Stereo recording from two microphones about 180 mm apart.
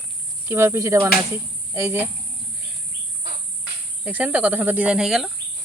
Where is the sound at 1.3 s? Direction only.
15° right (ahead or behind).